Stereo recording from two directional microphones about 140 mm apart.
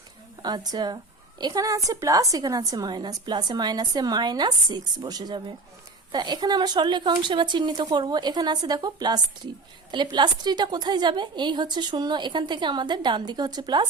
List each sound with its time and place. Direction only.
0.4 s a woman's voice: 30° right (ahead or behind)